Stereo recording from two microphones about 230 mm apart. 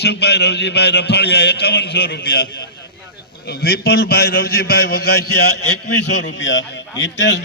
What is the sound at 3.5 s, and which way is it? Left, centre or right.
A man's voice, left.